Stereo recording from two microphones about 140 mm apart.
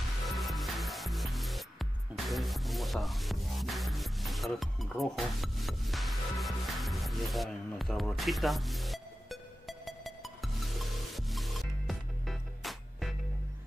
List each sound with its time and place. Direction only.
0.4 s music: centre (ahead or behind)